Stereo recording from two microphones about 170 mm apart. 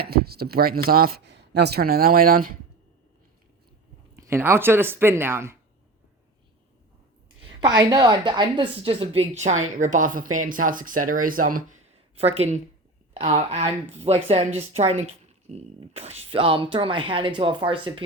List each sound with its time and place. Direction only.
0.0 s speech: 65° right (ahead or behind)
4.1 s speech: 15° right (ahead or behind)
7.6 s a woman's voice: 20° right (ahead or behind); by 11.8 s 55° right (ahead or behind)
12.1 s speech: 35° right (ahead or behind)